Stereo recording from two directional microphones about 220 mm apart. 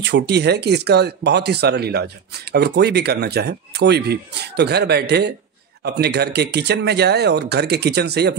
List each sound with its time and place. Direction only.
0.0 s speech: 50° right (ahead or behind)